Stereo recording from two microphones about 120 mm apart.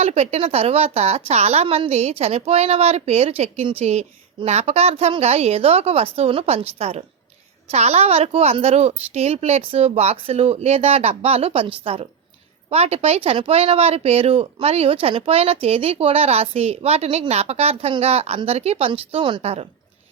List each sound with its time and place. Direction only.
0.0 s a woman's voice: 60° right (ahead or behind)